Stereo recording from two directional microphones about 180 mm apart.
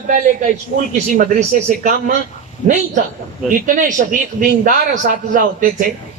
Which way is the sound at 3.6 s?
45° right (ahead or behind).